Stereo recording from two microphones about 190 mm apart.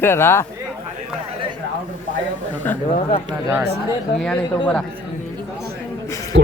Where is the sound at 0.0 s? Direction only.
10° left (ahead or behind).